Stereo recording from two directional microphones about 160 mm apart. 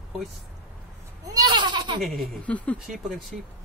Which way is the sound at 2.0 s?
5° left (ahead or behind).